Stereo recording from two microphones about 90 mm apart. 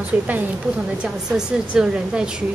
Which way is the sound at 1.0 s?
10° right (ahead or behind).